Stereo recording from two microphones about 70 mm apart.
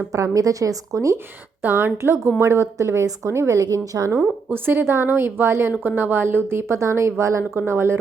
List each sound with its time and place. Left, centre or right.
0.1 s a woman's voice: right
1.6 s a woman's voice: right
3.7 s a woman's voice: right
4.4 s a woman's voice: right